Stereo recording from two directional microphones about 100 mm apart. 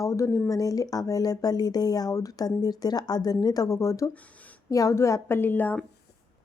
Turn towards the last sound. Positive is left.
turn(degrees=20)  # may be behind; listen again after turning